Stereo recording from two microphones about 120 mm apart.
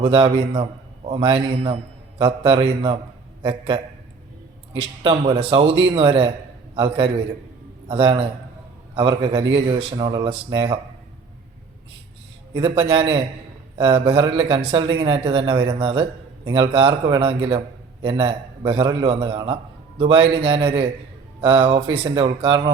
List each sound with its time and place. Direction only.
0.0 s a man's voice: 45° right (ahead or behind)
5.0 s a man's voice: 40° right (ahead or behind)
12.5 s a man's voice: 40° right (ahead or behind)